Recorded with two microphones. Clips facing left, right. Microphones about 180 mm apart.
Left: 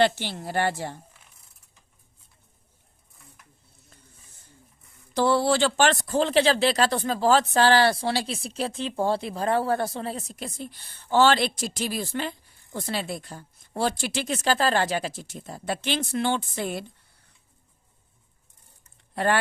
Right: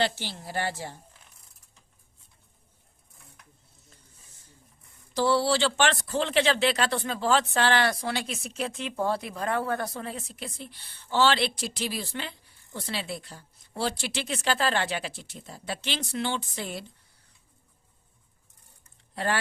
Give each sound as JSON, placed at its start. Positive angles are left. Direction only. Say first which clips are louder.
{"t": 0.0, "sound": "speech", "louder": "left 6 dB", "side_deg": 60}
{"t": 5.1, "sound": "a woman's voice", "louder": "left 2 dB", "side_deg": 55}
{"t": 19.1, "sound": "speech", "louder": "left 5 dB", "side_deg": 55}